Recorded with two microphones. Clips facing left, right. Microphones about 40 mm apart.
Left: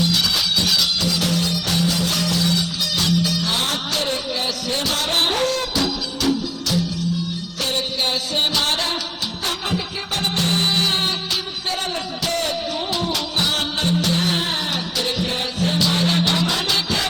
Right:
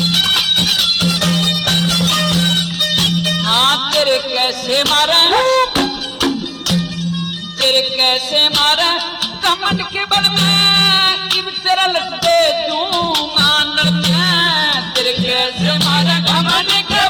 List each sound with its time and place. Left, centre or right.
0.0 s music: right